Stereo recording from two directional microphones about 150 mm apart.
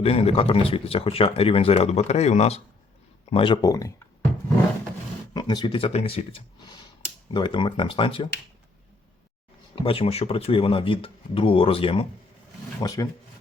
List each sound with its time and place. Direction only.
0.0 s speech: 40° left (ahead or behind); by 3.9 s 20° left (ahead or behind)
5.3 s speech: 30° left (ahead or behind)
9.7 s speech: 35° left (ahead or behind)
12.8 s speech: 25° left (ahead or behind)